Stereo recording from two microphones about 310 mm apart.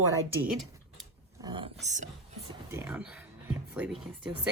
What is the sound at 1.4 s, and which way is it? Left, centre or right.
Speech, centre.